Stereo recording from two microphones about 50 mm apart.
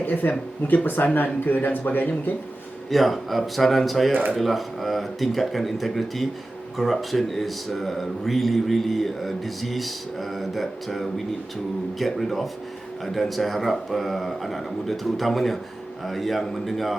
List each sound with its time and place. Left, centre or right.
0.0 s speech: left
2.9 s speech: centre